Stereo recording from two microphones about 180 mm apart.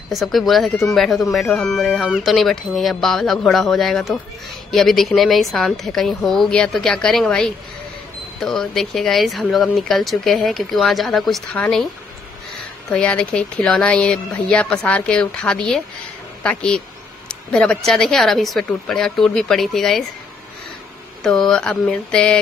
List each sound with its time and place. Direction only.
0.1 s speech: centre (ahead or behind)
12.9 s speech: 5° left (ahead or behind)
21.2 s speech: 5° left (ahead or behind)